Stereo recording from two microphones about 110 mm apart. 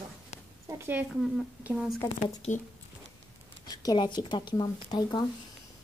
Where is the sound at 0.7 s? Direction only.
20° right (ahead or behind).